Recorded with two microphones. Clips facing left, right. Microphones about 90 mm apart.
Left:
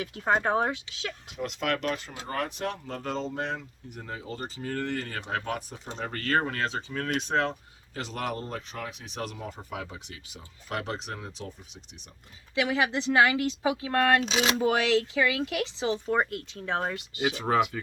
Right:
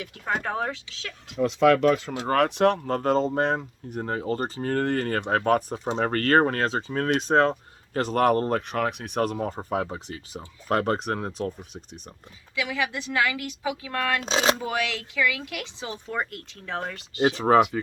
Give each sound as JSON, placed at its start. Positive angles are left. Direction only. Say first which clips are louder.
{"t": 0.0, "sound": "speech", "louder": "left 3 dB", "side_deg": 30}
{"t": 2.1, "sound": "speech", "louder": "right 10 dB", "side_deg": -80}
{"t": 5.9, "sound": "speech", "louder": "right 7 dB", "side_deg": -60}
{"t": 12.5, "sound": "speech", "louder": "left 2 dB", "side_deg": 30}
{"t": 14.2, "sound": "speech", "louder": "right 4 dB", "side_deg": -35}
{"t": 14.6, "sound": "speech", "louder": "left 5 dB", "side_deg": 30}
{"t": 17.2, "sound": "speech", "louder": "right 7 dB", "side_deg": -35}